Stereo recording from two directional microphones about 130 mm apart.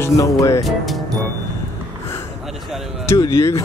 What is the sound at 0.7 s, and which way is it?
Speech, centre (ahead or behind).